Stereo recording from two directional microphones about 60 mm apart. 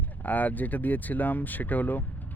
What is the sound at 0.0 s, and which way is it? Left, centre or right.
Speech, left.